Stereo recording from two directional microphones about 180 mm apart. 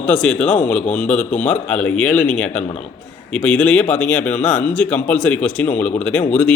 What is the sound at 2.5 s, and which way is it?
Speech, 40° left (ahead or behind).